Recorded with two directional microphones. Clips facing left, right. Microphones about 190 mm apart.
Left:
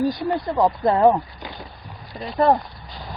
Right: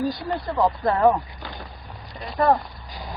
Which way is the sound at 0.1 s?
15° left (ahead or behind).